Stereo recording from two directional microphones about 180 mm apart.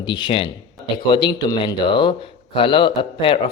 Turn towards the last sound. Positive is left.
turn(degrees=25)  # may be behind; listen again after turning